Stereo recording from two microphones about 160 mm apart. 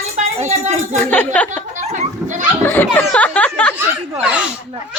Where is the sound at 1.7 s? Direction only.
45° right (ahead or behind).